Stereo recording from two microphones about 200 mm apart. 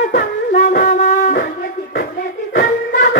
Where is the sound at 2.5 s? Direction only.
40° left (ahead or behind).